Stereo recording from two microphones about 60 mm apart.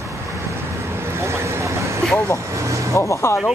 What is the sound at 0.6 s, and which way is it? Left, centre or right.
Vehicle, right.